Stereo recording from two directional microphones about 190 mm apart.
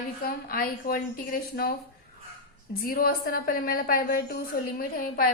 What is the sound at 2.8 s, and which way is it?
A woman's voice, 50° left (ahead or behind).